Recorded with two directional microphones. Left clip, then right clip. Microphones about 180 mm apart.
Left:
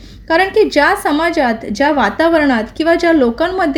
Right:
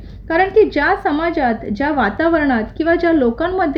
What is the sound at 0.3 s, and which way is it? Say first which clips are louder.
A woman's voice: left 1 dB; 40° left (ahead or behind).